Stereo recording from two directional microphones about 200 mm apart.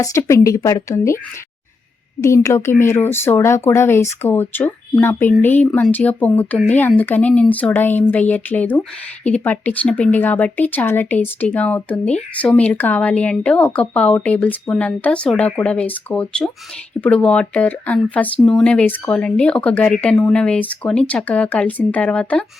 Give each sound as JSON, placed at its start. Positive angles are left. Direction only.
{"t": 0.0, "sound": "speech", "side_deg": 15}
{"t": 2.2, "sound": "speech", "side_deg": 15}